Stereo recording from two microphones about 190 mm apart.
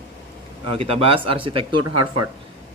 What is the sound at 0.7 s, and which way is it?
Speech, 30° right (ahead or behind).